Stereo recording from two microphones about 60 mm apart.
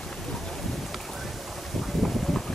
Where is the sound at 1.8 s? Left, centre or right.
Centre.